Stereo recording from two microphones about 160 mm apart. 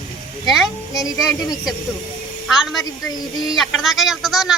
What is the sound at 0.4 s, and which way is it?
Speech, centre (ahead or behind).